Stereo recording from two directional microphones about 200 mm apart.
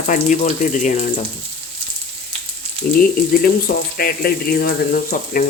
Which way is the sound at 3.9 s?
50° left (ahead or behind).